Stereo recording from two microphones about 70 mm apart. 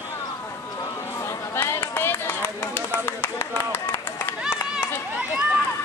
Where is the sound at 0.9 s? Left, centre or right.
Left.